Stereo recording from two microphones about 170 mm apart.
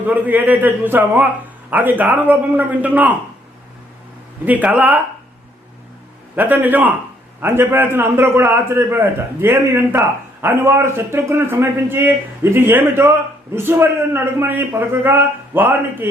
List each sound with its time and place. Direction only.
0.0 s a man's voice: 10° right (ahead or behind)
4.4 s a man's voice: 10° right (ahead or behind)
6.3 s a man's voice: 10° right (ahead or behind)